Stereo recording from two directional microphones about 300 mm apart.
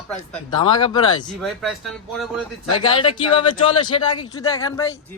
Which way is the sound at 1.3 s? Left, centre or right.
Centre.